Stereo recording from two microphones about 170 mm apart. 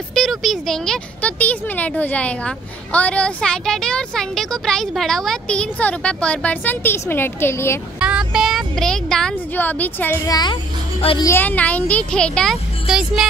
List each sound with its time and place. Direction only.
0.1 s speech: centre (ahead or behind)
8.0 s speech: 5° right (ahead or behind); by 10.1 s 10° left (ahead or behind)
10.2 s a woman's voice: 25° left (ahead or behind)
11.2 s speech: 10° left (ahead or behind)